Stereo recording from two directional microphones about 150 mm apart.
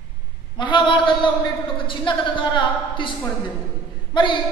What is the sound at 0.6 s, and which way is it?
A woman's voice, 30° left (ahead or behind).